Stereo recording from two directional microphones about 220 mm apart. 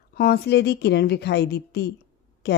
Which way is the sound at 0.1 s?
45° left (ahead or behind).